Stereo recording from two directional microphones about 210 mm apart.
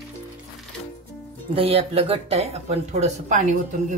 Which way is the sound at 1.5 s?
25° right (ahead or behind).